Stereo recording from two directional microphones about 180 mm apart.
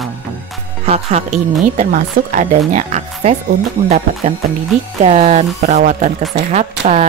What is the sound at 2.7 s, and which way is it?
Music, 40° right (ahead or behind).